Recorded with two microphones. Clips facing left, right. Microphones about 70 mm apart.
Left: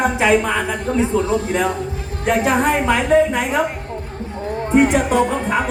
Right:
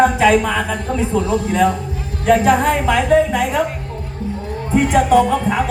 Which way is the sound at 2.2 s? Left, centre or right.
Centre.